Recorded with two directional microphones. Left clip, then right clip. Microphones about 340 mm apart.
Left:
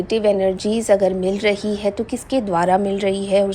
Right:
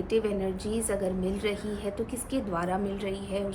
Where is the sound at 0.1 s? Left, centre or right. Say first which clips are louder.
Left 12 dB; centre.